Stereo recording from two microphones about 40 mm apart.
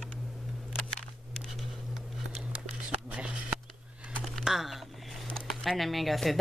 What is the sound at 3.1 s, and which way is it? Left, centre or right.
Shuffling cards, right.